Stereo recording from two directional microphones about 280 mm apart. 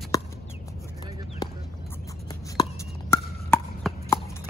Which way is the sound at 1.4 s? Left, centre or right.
Centre.